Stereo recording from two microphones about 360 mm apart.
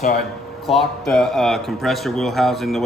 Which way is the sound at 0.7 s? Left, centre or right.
Centre.